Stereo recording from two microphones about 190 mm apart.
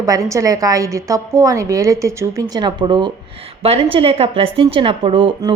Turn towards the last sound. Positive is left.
turn(degrees=-25)  # may be behind; listen again after turning